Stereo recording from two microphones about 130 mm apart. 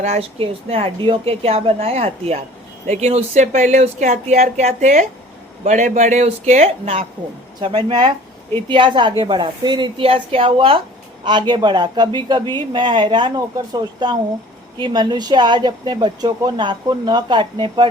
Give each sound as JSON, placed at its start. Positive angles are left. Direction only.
{"t": 0.0, "sound": "a woman's voice", "side_deg": -55}
{"t": 7.6, "sound": "speech", "side_deg": -40}